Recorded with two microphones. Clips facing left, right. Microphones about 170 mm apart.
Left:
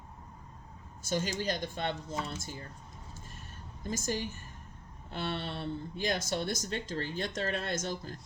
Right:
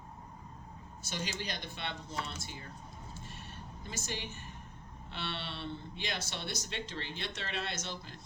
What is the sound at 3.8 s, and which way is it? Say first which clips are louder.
Speech: left 8 dB; 45° left (ahead or behind).